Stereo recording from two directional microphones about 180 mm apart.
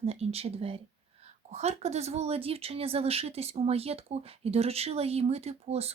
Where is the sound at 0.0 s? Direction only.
35° right (ahead or behind).